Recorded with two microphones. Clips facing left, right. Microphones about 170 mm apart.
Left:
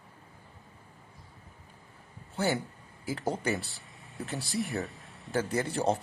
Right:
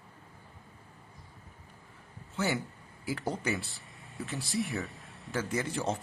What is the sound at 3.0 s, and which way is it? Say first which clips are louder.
Speech: left 2 dB; 20° left (ahead or behind).